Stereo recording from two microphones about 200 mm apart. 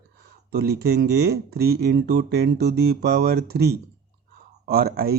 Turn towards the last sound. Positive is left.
turn(degrees=-50)  # may be behind; listen again after turning